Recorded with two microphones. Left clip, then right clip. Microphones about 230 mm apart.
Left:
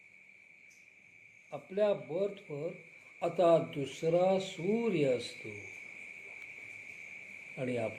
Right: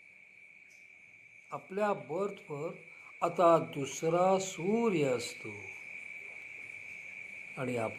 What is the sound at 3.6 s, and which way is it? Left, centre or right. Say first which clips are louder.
Speech: right 1 dB; centre.